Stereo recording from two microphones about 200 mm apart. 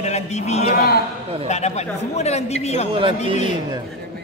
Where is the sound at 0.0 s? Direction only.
35° left (ahead or behind).